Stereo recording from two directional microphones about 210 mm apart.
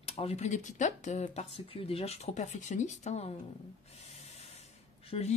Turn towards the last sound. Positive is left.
turn(degrees=30)  # may be behind; listen again after turning